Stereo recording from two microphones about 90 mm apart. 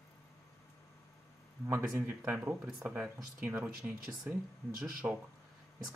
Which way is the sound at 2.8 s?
20° right (ahead or behind).